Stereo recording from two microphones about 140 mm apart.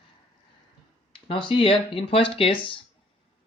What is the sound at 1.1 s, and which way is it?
Speech, 40° left (ahead or behind).